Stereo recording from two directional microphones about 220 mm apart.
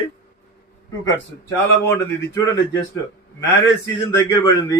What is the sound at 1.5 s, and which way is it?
Speech, 15° left (ahead or behind).